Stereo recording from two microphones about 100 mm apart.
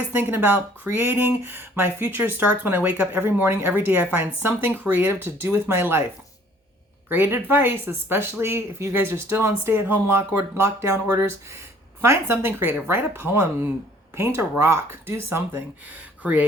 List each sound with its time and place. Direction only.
0.1 s speech: 20° right (ahead or behind)
7.1 s speech: 20° right (ahead or behind)